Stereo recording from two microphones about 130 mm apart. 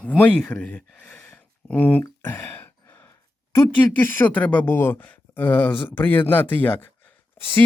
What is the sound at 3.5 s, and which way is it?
Speech, 15° left (ahead or behind).